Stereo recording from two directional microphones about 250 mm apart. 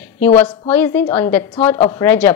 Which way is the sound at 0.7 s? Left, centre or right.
Centre.